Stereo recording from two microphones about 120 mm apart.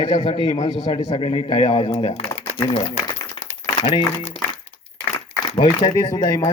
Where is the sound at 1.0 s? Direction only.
55° left (ahead or behind).